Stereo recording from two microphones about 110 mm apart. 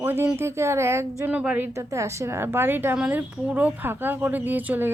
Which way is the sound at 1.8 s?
25° right (ahead or behind).